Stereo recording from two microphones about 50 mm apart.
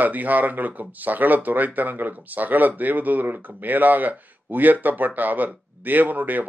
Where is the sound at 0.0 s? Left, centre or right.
Right.